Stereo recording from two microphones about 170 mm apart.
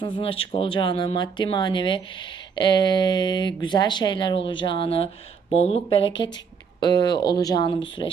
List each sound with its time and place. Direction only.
0.0 s speech: 30° left (ahead or behind)